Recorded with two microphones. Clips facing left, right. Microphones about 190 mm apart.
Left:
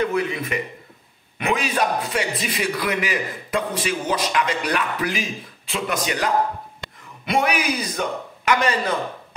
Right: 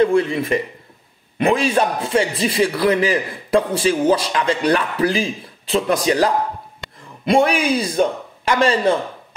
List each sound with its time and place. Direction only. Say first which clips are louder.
0.0 s a man's voice: right 7 dB; 30° right (ahead or behind)